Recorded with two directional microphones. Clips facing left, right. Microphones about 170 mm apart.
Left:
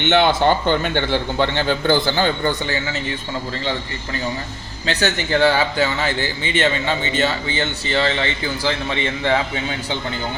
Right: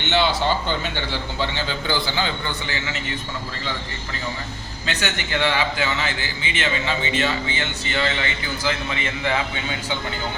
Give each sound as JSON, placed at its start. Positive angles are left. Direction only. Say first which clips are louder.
{"t": 0.0, "sound": "speech", "louder": "left 5 dB", "side_deg": 55}
{"t": 4.9, "sound": "speech", "louder": "left 6 dB", "side_deg": 35}